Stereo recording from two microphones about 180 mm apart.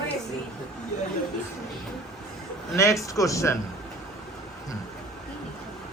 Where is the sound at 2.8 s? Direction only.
15° left (ahead or behind).